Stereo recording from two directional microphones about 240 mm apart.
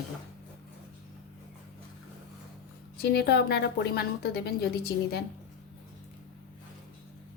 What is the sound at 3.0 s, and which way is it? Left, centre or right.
A woman's voice, left.